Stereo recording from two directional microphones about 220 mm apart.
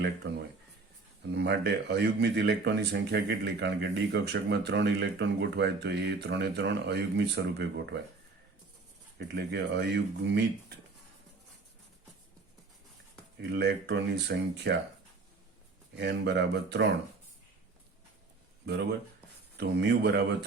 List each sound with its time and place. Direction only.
0.0 s speech: 50° right (ahead or behind)
9.1 s speech: 50° right (ahead or behind)
13.4 s speech: 50° right (ahead or behind)
16.0 s speech: 50° right (ahead or behind)
18.6 s speech: 50° right (ahead or behind)